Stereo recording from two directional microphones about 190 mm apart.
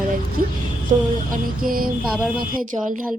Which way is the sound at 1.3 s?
50° right (ahead or behind).